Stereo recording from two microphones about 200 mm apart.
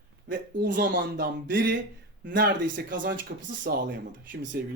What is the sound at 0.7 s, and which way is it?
Speech, 45° right (ahead or behind).